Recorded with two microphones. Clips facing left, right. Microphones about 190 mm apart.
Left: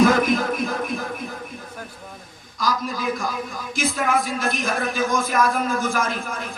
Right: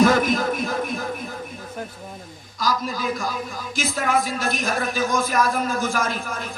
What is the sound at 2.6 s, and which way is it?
Speech, 50° left (ahead or behind).